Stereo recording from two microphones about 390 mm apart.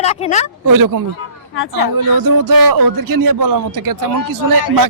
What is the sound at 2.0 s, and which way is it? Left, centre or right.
Speech, right.